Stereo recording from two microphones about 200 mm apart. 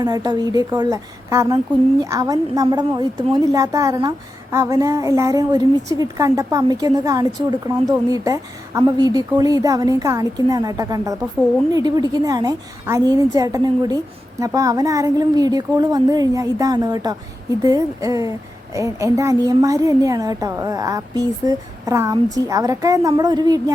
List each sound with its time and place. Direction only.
0.0 s a woman's voice: 20° right (ahead or behind)